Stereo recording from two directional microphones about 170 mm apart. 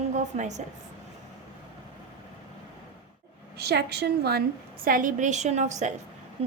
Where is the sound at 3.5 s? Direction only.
70° right (ahead or behind).